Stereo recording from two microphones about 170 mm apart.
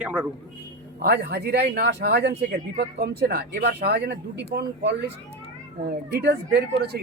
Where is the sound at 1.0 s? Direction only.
65° right (ahead or behind).